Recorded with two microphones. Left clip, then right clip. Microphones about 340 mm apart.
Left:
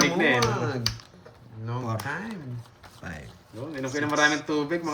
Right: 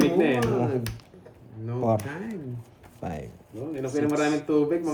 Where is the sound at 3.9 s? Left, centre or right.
Centre.